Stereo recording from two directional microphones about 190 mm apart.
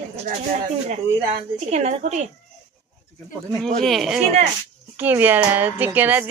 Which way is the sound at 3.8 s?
Centre (ahead or behind).